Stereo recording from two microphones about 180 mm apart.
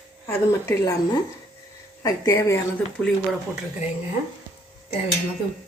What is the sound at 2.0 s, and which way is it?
Speech, 15° left (ahead or behind).